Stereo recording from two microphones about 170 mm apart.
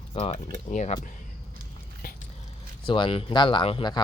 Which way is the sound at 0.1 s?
35° left (ahead or behind).